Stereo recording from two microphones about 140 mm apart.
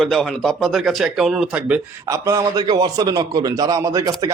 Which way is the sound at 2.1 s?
25° right (ahead or behind).